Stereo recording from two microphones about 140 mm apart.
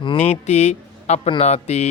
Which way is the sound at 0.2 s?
55° left (ahead or behind).